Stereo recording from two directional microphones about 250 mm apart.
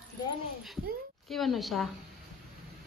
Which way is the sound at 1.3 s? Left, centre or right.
Centre.